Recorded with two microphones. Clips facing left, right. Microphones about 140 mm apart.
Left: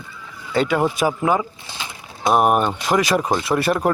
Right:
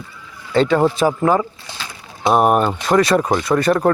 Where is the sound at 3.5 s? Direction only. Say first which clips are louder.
Right 4 dB; 15° left (ahead or behind).